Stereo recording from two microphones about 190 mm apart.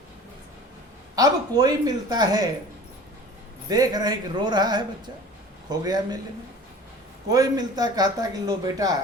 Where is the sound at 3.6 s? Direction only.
20° right (ahead or behind).